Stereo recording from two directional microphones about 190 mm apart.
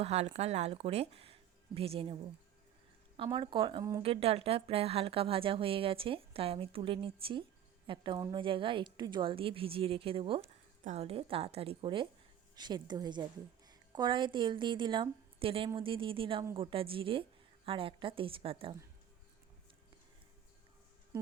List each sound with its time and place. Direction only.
0.0 s speech: 35° right (ahead or behind)
3.2 s speech: 25° right (ahead or behind)
4.0 s a woman's voice: 30° right (ahead or behind)